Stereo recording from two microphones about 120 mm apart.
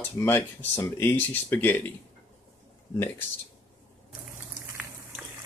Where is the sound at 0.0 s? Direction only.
15° left (ahead or behind).